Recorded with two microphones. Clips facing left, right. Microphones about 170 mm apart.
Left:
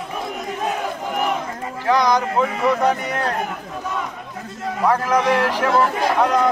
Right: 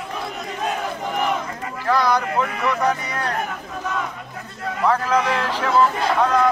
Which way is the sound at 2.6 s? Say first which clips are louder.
Left 3 dB; 25° left (ahead or behind).